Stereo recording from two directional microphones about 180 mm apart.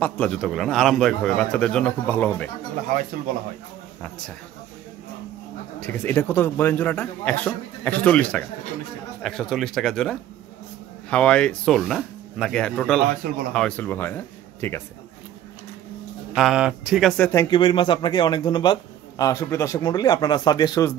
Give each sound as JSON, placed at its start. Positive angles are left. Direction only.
{"t": 0.0, "sound": "a man's voice", "side_deg": 5}
{"t": 5.8, "sound": "a man's voice", "side_deg": 10}
{"t": 16.3, "sound": "a man's voice", "side_deg": -5}
{"t": 17.2, "sound": "a man's voice", "side_deg": 15}